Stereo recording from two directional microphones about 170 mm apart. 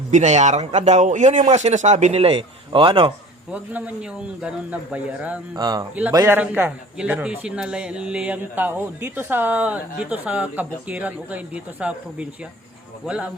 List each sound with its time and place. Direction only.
0.1 s a man's voice: 45° right (ahead or behind)
3.5 s a man's voice: 10° right (ahead or behind)
5.5 s a man's voice: 25° right (ahead or behind); by 13.3 s 5° right (ahead or behind)